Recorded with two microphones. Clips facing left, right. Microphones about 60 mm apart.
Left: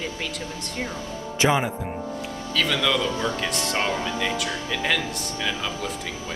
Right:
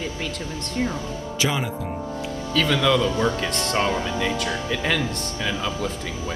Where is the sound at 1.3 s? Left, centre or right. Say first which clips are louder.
Left 4 dB; left.